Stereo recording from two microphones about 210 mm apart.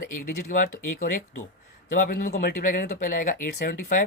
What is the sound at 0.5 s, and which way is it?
Speech, 40° left (ahead or behind).